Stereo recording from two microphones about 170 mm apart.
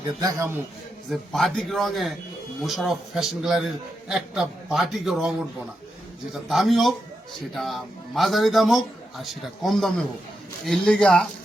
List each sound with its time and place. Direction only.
0.2 s a man's voice: 20° right (ahead or behind)
1.1 s a man's voice: centre (ahead or behind)
6.3 s a man's voice: centre (ahead or behind)